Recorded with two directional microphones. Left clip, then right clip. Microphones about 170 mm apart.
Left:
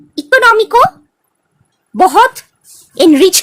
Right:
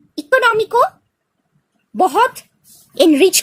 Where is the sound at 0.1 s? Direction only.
15° left (ahead or behind).